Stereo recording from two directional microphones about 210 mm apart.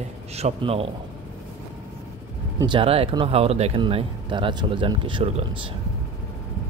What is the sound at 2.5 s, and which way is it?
Speech, 25° right (ahead or behind).